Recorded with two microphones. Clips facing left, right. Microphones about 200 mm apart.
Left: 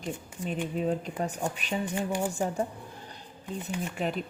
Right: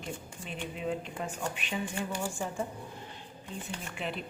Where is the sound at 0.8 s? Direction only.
40° left (ahead or behind).